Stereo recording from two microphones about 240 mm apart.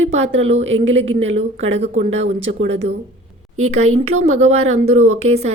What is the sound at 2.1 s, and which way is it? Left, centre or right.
Speech, right.